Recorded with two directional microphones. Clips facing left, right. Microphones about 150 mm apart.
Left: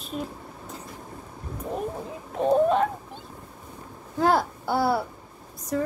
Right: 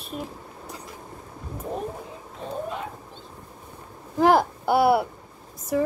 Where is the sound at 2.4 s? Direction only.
75° left (ahead or behind).